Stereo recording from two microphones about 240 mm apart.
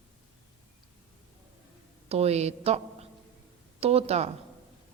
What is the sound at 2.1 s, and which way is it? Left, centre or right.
A woman's voice, right.